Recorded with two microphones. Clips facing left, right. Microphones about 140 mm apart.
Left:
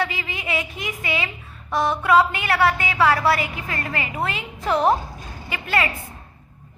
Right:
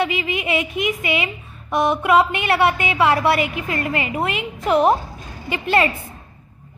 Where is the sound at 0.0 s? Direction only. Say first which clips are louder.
Right 5 dB; 20° right (ahead or behind).